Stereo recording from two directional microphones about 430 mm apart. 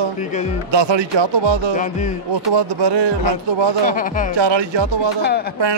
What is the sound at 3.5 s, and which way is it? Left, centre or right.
Speech, right.